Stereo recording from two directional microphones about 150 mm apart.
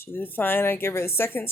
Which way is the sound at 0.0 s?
15° left (ahead or behind).